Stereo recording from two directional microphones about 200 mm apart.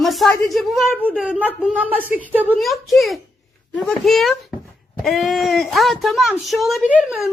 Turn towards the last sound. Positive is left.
turn(degrees=-5)  # may be behind; listen again after turning